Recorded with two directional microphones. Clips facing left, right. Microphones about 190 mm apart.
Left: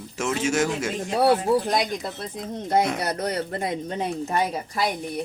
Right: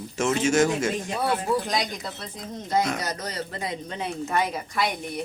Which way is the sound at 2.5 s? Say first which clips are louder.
Left 2 dB; 60° left (ahead or behind).